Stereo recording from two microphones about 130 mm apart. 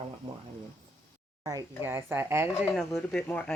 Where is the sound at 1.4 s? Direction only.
30° right (ahead or behind).